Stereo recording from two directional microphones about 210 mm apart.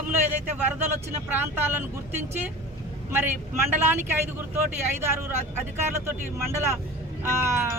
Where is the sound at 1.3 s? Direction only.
10° right (ahead or behind).